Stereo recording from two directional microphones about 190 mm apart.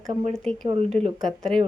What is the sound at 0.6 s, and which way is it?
Speech, 30° right (ahead or behind).